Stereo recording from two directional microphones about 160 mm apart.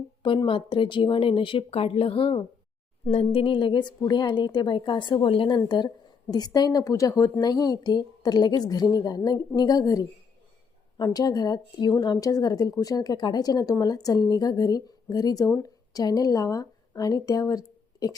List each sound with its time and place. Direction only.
0.2 s a woman's voice: 30° left (ahead or behind)